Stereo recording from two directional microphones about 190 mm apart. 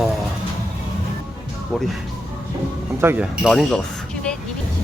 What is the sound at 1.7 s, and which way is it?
Speech, 5° left (ahead or behind).